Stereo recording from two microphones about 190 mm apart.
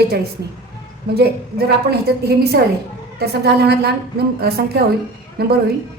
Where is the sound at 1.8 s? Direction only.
55° right (ahead or behind).